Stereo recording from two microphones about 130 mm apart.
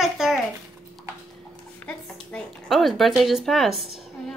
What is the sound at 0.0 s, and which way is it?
Babbling, 5° right (ahead or behind).